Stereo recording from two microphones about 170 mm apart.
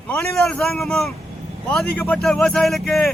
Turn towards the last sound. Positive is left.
turn(degrees=5)  # may be behind; listen again after turning